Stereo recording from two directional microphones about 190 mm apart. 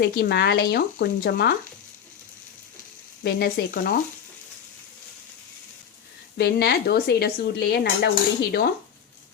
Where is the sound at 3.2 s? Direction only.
55° left (ahead or behind).